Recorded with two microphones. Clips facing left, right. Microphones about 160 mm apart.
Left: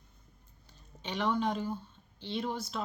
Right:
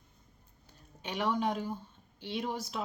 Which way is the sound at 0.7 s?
10° right (ahead or behind).